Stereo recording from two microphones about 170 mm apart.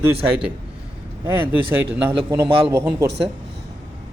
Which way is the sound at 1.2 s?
10° right (ahead or behind).